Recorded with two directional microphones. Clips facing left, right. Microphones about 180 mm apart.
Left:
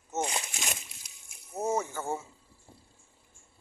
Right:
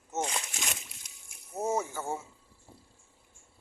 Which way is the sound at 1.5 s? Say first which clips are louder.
Left 1 dB; 5° right (ahead or behind).